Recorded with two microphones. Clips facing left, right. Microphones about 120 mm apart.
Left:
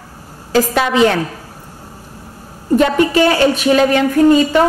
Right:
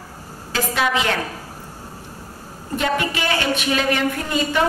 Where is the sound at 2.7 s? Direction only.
40° left (ahead or behind).